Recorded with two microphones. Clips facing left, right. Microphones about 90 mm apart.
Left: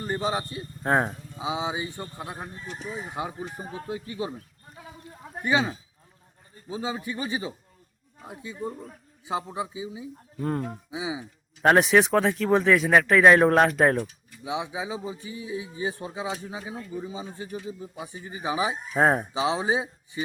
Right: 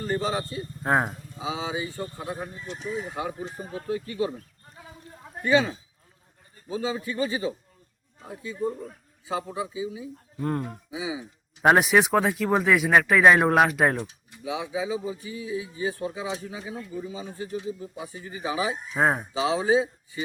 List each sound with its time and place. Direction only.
0.0 s a man's voice: 20° left (ahead or behind)
0.8 s speech: 5° right (ahead or behind)
1.4 s speech: 20° left (ahead or behind)
5.4 s speech: 20° left (ahead or behind)
11.6 s speech: 10° right (ahead or behind)
14.4 s speech: 25° left (ahead or behind)
18.9 s speech: centre (ahead or behind)
19.2 s speech: 20° left (ahead or behind)